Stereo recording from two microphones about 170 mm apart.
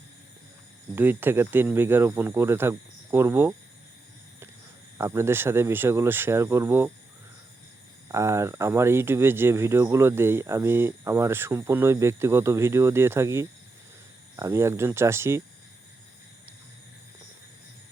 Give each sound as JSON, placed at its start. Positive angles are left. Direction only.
{"t": 0.9, "sound": "speech", "side_deg": -10}
{"t": 4.9, "sound": "speech", "side_deg": -15}
{"t": 8.0, "sound": "speech", "side_deg": -15}